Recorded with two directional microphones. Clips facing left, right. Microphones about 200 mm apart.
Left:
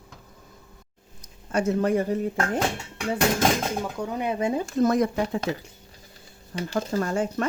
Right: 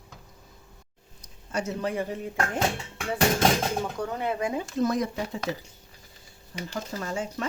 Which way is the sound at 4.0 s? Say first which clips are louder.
Left 2 dB; 10° left (ahead or behind).